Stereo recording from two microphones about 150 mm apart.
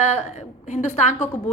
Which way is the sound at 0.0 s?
50° left (ahead or behind).